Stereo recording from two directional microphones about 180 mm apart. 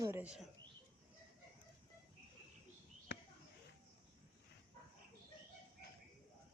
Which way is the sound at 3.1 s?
85° left.